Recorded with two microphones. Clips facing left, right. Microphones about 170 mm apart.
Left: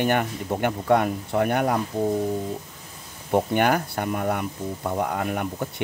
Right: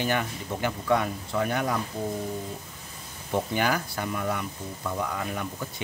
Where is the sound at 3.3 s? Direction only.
55° left (ahead or behind).